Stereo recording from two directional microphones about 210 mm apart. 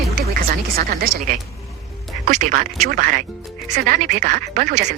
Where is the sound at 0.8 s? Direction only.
45° right (ahead or behind).